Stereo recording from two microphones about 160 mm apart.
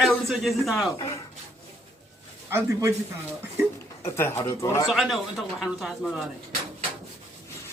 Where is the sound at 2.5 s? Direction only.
15° right (ahead or behind).